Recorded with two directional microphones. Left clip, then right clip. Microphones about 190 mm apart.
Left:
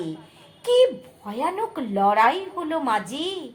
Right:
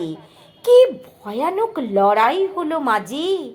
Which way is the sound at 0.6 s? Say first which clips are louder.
Right 6 dB; 25° right (ahead or behind).